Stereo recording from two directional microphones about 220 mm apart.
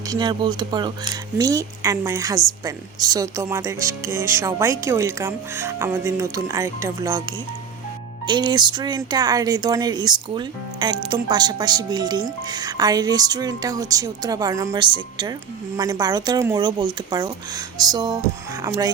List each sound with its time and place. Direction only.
0.1 s speech: 20° right (ahead or behind)